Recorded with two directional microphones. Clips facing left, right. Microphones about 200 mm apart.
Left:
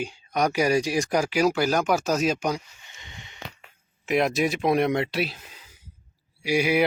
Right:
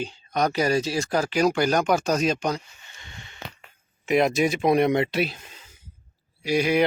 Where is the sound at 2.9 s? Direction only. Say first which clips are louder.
Even; 20° left (ahead or behind).